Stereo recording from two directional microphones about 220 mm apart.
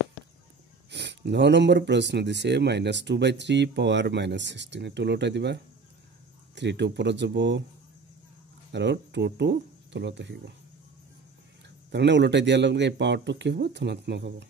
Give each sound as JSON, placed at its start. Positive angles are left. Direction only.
{"t": 0.8, "sound": "speech", "side_deg": -50}
{"t": 8.7, "sound": "speech", "side_deg": -50}
{"t": 11.9, "sound": "speech", "side_deg": -50}